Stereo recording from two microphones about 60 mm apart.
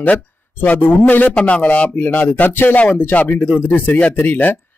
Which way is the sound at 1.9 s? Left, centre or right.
Left.